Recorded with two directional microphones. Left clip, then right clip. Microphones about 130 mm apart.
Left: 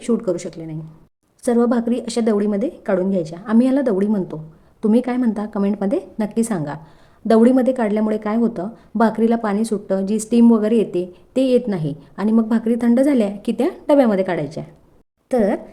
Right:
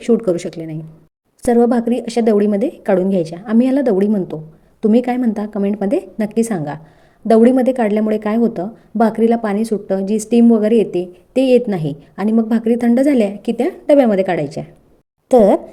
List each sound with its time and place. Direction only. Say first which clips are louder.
0.0 s speech: right 5 dB; 20° right (ahead or behind)
1.4 s a woman's voice: right 4 dB; 15° right (ahead or behind)
3.5 s a woman's voice: right 2 dB; 10° right (ahead or behind)
13.4 s a woman's voice: right 2 dB; centre (ahead or behind); by 14.7 s 15° right (ahead or behind)
15.3 s speech: right 8 dB; 35° right (ahead or behind)